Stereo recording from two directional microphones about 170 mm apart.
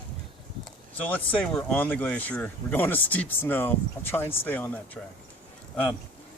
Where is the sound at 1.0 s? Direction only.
10° left (ahead or behind).